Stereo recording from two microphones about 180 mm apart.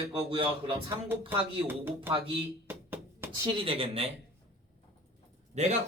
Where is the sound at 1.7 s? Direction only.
10° right (ahead or behind).